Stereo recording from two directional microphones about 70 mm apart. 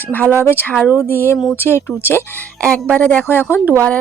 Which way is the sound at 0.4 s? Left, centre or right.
Left.